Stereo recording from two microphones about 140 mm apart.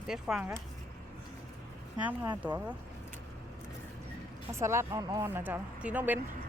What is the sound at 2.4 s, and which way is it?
Speech, 10° right (ahead or behind).